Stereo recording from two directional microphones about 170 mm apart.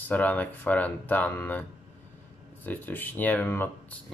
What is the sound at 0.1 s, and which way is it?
Speech, 10° left (ahead or behind).